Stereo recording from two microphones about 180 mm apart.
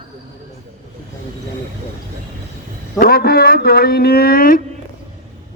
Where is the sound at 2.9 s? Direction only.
55° left (ahead or behind).